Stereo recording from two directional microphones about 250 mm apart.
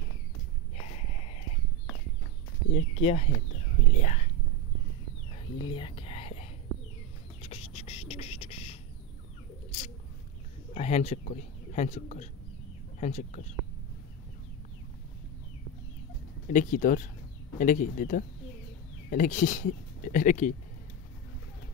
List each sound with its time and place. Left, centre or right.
0.7 s walk: left
2.7 s speech: left
5.3 s whispering: centre
7.4 s music: left
10.7 s speech: left
16.4 s speech: left